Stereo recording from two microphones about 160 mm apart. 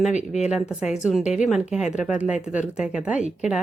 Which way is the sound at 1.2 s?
45° left (ahead or behind).